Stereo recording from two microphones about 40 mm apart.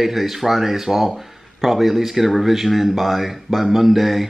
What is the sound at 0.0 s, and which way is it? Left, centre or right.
Speech, centre.